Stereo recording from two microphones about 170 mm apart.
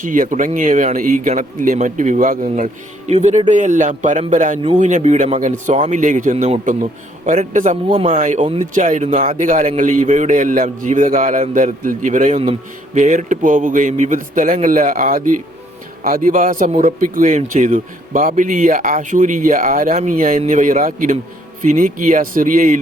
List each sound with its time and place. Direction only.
0.0 s a man's voice: 50° right (ahead or behind)
3.1 s a man's voice: 40° right (ahead or behind)
7.9 s speech: 30° right (ahead or behind)
8.1 s a man's voice: 45° right (ahead or behind)